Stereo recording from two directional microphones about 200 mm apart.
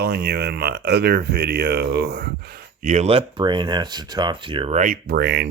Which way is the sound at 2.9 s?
30° right (ahead or behind).